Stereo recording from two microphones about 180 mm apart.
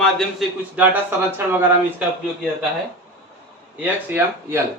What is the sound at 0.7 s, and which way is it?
Speech, 10° right (ahead or behind).